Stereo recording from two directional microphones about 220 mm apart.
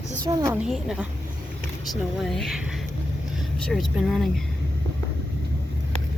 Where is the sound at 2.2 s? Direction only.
Centre (ahead or behind).